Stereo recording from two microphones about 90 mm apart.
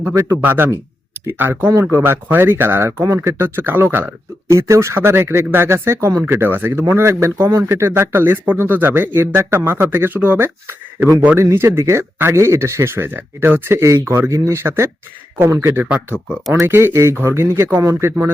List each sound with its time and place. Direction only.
0.0 s speech: 30° right (ahead or behind)